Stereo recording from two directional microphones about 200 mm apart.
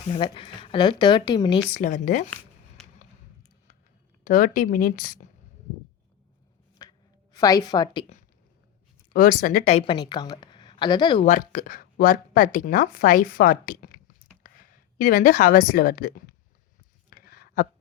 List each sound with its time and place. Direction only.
0.1 s a woman's voice: 25° left (ahead or behind)
1.7 s speech: 40° left (ahead or behind)
4.2 s a woman's voice: 45° left (ahead or behind)
6.8 s a sound: 20° left (ahead or behind)
7.3 s a woman's voice: 20° left (ahead or behind)
9.1 s a woman's voice: 40° left (ahead or behind); by 11.3 s 25° left (ahead or behind)
11.3 s a woman's voice: 40° left (ahead or behind)
17.2 s a sound: 50° left (ahead or behind)